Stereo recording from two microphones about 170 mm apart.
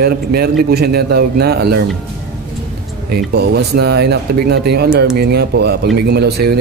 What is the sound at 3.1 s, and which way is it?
Speech, 70° right (ahead or behind).